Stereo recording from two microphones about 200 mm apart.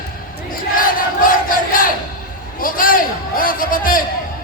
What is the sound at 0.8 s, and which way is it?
Battle cry, 45° left (ahead or behind).